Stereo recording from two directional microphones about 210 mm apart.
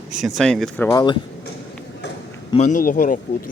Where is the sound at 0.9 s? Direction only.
20° left (ahead or behind).